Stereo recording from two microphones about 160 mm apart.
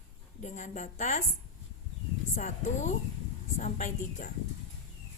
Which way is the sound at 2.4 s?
45° left (ahead or behind).